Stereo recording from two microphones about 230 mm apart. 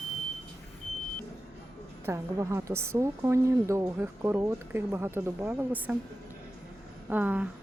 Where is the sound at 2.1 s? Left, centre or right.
Centre.